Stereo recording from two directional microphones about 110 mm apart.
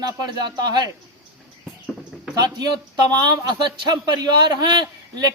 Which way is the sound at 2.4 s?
40° right (ahead or behind).